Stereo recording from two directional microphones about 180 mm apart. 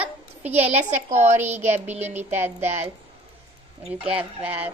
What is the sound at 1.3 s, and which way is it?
Speech, 10° right (ahead or behind).